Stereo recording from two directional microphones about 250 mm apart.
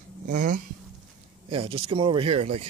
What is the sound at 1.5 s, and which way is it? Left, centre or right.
Speech, right.